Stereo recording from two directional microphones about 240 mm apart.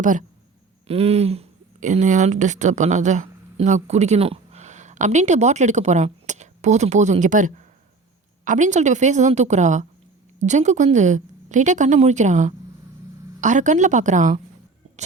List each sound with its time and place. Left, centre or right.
0.0 s a woman's voice: right